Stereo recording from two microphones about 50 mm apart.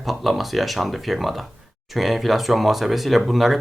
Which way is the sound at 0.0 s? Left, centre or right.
Centre.